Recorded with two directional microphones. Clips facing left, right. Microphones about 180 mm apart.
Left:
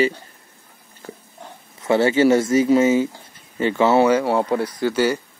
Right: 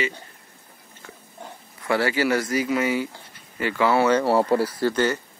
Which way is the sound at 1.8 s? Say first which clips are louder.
Left 6 dB; 20° left (ahead or behind).